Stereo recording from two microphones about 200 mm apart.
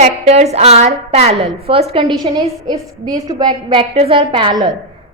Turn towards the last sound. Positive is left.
turn(degrees=-25)  # may be behind; listen again after turning